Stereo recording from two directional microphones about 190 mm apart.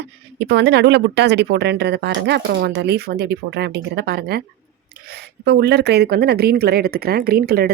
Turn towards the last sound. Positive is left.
turn(degrees=-55)  # may be behind; listen again after turning